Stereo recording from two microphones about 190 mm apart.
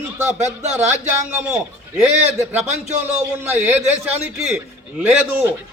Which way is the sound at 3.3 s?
5° right (ahead or behind).